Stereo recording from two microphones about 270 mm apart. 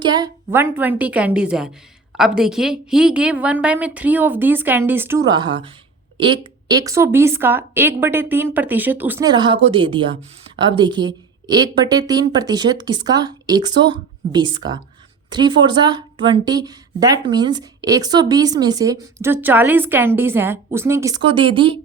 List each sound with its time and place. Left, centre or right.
0.0 s a woman's voice: centre